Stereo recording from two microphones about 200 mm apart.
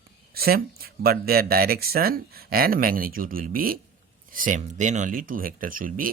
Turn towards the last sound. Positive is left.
turn(degrees=-45)  # may be behind; listen again after turning